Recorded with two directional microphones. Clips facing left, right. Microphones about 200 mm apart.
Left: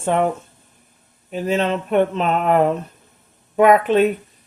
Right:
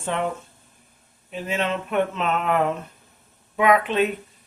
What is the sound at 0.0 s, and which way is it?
Speech, 45° left (ahead or behind).